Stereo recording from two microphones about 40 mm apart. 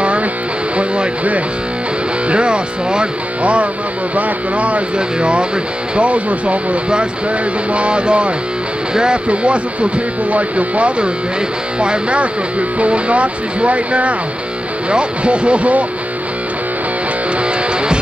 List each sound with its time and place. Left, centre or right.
0.7 s speech: right
9.3 s speech: right